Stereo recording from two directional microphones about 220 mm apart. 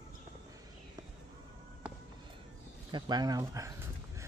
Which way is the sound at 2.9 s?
20° right (ahead or behind).